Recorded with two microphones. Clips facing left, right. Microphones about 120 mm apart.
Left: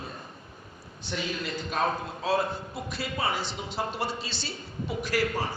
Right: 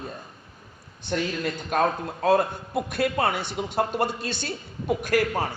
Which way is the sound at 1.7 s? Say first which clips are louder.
Right 5 dB; 55° right (ahead or behind).